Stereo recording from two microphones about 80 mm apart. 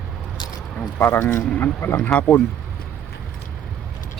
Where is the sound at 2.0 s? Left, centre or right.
Centre.